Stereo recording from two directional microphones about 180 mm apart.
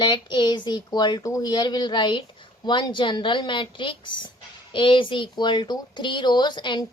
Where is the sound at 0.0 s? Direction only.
25° left (ahead or behind).